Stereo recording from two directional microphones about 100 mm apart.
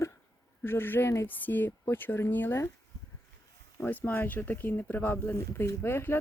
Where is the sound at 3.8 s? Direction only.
15° left (ahead or behind).